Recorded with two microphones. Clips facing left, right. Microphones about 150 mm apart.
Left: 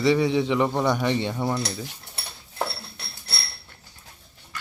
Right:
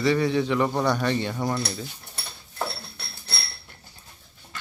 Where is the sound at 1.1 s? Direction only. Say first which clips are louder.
Left 1 dB; 20° left (ahead or behind).